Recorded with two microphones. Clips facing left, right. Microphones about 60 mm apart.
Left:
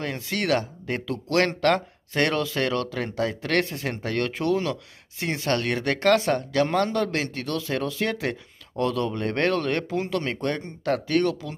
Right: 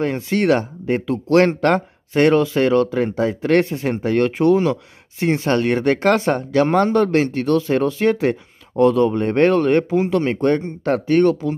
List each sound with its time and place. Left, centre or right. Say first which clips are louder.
0.0 s speech: right 9 dB; right